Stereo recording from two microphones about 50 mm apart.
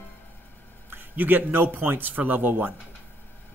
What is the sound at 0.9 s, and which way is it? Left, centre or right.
A man's voice, right.